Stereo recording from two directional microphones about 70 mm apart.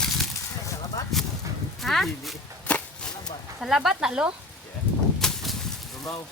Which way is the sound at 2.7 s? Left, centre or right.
Centre.